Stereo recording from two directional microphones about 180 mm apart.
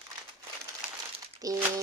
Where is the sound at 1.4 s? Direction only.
20° right (ahead or behind).